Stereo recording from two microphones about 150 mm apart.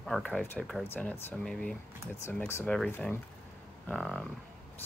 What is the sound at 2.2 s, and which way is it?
Speech, 15° left (ahead or behind).